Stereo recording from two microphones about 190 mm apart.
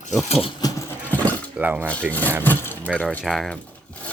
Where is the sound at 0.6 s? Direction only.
10° left (ahead or behind).